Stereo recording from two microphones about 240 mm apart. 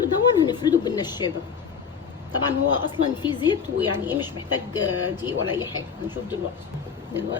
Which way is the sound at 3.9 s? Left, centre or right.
Centre.